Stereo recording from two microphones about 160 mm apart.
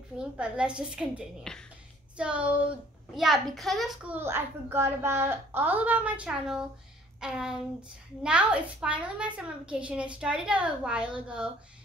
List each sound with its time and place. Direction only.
0.2 s a child's voice: 5° right (ahead or behind)
1.5 s speech: 5° left (ahead or behind)
2.1 s a child's voice: 5° right (ahead or behind)